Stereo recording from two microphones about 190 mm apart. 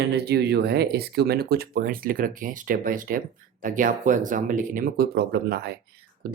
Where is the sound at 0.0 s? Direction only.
60° right (ahead or behind).